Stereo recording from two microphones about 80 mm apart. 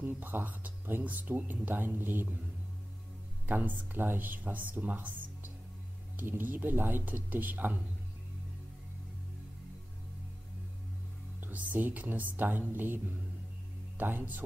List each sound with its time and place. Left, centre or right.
0.0 s speech: right
3.4 s speech: right
6.1 s speech: right
11.4 s speech: right